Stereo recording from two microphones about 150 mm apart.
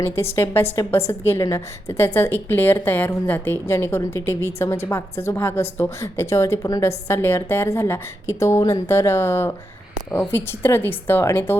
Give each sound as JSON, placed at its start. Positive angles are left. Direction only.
{"t": 0.0, "sound": "a woman's voice", "side_deg": 15}